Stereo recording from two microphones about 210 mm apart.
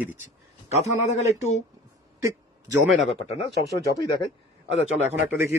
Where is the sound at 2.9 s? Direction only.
30° left (ahead or behind).